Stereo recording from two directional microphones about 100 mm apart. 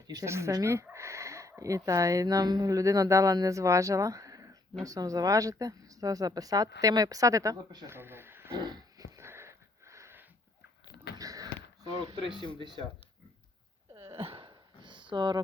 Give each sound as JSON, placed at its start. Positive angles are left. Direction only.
{"t": 0.1, "sound": "a woman's voice", "side_deg": -30}
{"t": 7.9, "sound": "speech", "side_deg": -25}
{"t": 8.5, "sound": "dog", "side_deg": -45}
{"t": 9.0, "sound": "sniff", "side_deg": -30}
{"t": 11.2, "sound": "a sound", "side_deg": -35}
{"t": 14.1, "sound": "a sound", "side_deg": -80}